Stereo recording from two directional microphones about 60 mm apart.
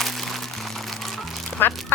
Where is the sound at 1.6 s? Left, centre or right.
Left.